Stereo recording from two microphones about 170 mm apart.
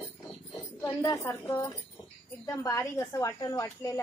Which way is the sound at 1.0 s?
15° left (ahead or behind).